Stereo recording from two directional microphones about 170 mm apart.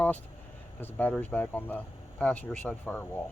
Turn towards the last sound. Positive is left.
turn(degrees=10)  # may be behind; listen again after turning